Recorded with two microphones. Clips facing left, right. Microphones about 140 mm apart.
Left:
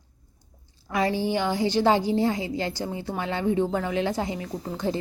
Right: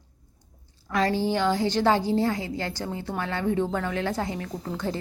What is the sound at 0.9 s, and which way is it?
A woman's voice, 10° left (ahead or behind).